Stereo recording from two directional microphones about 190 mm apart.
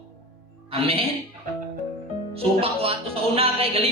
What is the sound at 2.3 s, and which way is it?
Speech, 30° right (ahead or behind).